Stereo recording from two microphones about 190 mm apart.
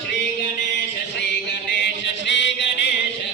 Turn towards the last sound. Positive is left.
turn(degrees=70)  # may be behind; listen again after turning